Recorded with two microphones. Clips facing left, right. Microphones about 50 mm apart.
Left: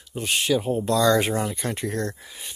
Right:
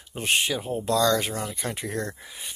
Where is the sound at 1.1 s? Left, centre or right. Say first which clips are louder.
Left 5 dB; left.